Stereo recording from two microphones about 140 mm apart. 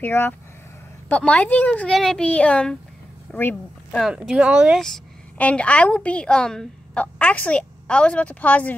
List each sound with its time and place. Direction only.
0.0 s speech: 15° left (ahead or behind); by 4.7 s 10° right (ahead or behind)
4.7 s a woman's voice: 5° left (ahead or behind)